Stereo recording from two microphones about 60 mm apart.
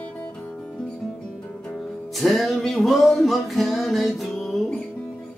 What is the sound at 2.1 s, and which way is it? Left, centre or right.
Music, centre.